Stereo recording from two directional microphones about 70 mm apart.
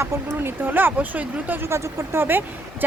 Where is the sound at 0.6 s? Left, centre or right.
Right.